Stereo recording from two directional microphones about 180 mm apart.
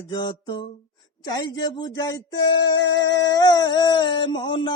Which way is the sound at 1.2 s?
20° left (ahead or behind).